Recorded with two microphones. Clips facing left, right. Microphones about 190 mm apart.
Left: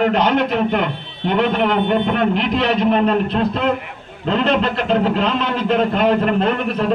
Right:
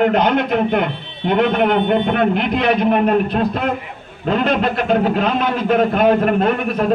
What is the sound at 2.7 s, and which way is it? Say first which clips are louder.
Speech: right 1 dB; 10° right (ahead or behind).